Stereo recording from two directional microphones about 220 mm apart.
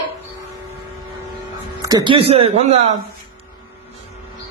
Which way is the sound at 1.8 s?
15° right (ahead or behind).